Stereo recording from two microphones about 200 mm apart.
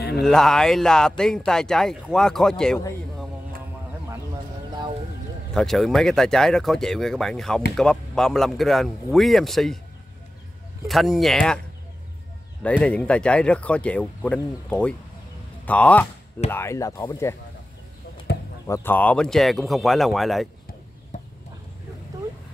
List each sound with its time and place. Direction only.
0.2 s speech: centre (ahead or behind)
5.5 s speech: centre (ahead or behind)
10.9 s speech: centre (ahead or behind)
12.6 s speech: 5° left (ahead or behind)
18.7 s speech: 10° left (ahead or behind)
21.1 s chicken: 40° left (ahead or behind)